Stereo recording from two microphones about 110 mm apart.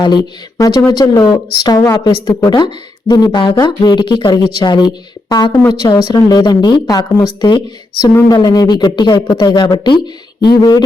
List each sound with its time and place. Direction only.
0.0 s speech: 40° left (ahead or behind)
3.1 s speech: 45° left (ahead or behind)